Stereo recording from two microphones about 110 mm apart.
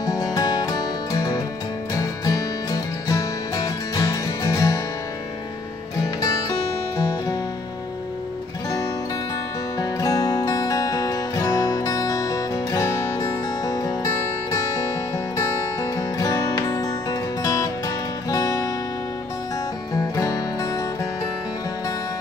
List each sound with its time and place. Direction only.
0.0 s music: 35° left (ahead or behind)
6.2 s music: 40° left (ahead or behind)
9.8 s music: 35° left (ahead or behind)
16.0 s music: 35° left (ahead or behind)
20.2 s music: 30° left (ahead or behind)